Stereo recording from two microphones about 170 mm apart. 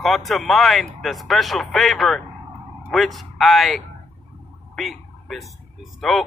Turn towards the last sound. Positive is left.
turn(degrees=0)  # may be behind; listen again after turning